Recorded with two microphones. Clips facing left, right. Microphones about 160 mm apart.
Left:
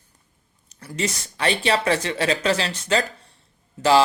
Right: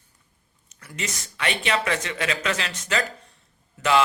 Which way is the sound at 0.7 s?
30° left (ahead or behind).